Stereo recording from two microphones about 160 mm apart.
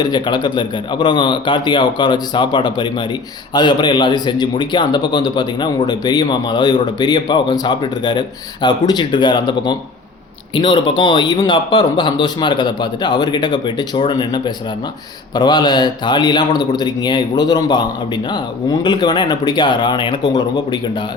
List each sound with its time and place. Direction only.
0.0 s speech: 25° left (ahead or behind)